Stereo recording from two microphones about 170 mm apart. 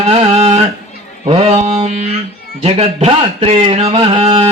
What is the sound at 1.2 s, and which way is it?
Mantra, 35° right (ahead or behind).